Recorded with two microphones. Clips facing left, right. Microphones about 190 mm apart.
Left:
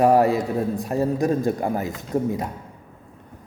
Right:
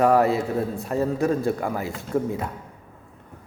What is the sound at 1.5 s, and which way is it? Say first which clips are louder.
Speech: left 3 dB; 35° left (ahead or behind).